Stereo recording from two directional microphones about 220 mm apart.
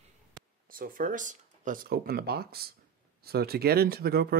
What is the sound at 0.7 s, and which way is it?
Speech, 40° right (ahead or behind).